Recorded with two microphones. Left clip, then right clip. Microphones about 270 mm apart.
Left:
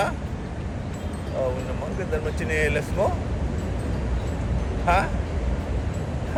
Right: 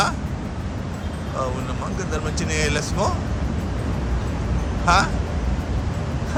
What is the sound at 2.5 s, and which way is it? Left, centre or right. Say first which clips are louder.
Speech: even; centre.